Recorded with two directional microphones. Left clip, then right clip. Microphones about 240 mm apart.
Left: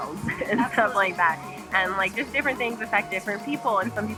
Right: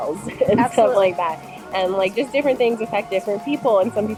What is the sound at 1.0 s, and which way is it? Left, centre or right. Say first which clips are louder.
Speech: right 3 dB; left.